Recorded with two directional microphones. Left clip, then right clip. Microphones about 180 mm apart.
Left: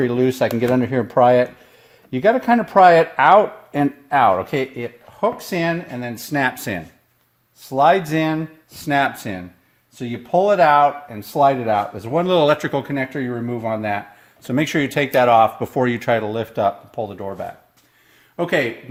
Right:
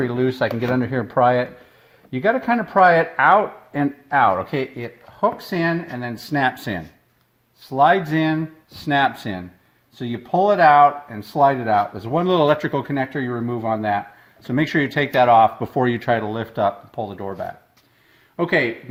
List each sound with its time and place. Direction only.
0.0 s speech: 25° left (ahead or behind)
7.7 s speech: 20° left (ahead or behind)
18.3 s speech: 25° left (ahead or behind)